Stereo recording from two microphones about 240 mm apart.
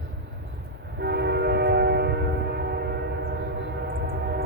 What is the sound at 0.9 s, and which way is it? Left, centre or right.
Train, right.